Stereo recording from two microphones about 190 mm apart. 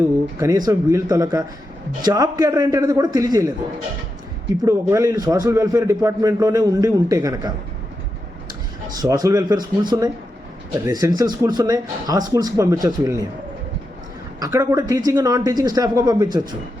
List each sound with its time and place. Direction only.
0.3 s a man's voice: 20° right (ahead or behind)
4.6 s a man's voice: 15° right (ahead or behind)
9.0 s speech: 20° right (ahead or behind)
14.3 s speech: 20° right (ahead or behind)